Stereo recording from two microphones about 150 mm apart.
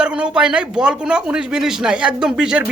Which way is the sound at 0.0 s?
5° right (ahead or behind).